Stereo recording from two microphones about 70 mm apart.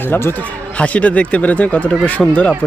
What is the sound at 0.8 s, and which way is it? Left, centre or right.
Speech, centre.